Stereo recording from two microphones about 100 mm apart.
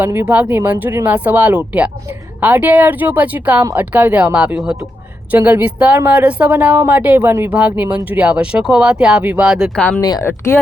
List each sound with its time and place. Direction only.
0.0 s speech: 20° right (ahead or behind); by 9.7 s 5° right (ahead or behind)
9.7 s speech: 10° left (ahead or behind)
10.0 s speech: 40° left (ahead or behind)
10.2 s speech: 25° left (ahead or behind)